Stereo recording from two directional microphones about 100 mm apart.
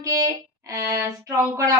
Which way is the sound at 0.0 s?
35° right (ahead or behind).